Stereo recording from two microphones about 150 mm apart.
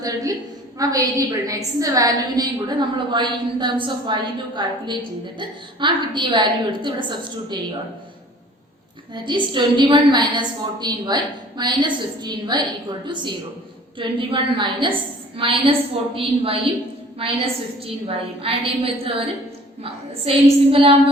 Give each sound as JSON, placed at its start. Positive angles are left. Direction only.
{"t": 0.0, "sound": "a woman's voice", "side_deg": -25}
{"t": 9.2, "sound": "a woman's voice", "side_deg": -30}